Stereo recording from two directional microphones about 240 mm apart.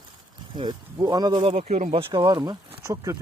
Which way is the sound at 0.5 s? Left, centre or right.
Centre.